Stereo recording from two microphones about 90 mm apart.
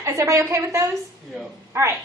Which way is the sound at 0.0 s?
30° right (ahead or behind).